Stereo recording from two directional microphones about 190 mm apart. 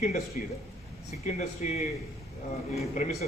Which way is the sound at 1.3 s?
35° left (ahead or behind).